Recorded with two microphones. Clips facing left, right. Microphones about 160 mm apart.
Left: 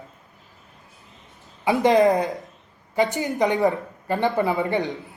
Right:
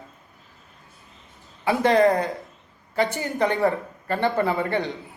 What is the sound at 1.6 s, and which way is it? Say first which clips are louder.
A man's voice: left 1 dB; 20° left (ahead or behind).